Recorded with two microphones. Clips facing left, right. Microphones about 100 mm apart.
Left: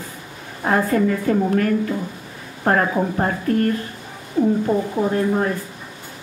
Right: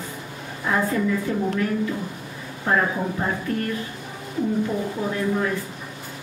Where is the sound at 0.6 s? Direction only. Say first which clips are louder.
Left 5 dB; 55° left (ahead or behind).